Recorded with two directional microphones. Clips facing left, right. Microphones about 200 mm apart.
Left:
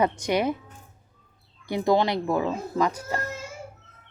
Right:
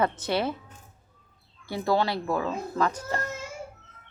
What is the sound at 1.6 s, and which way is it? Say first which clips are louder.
Speech: left 3 dB; 15° left (ahead or behind).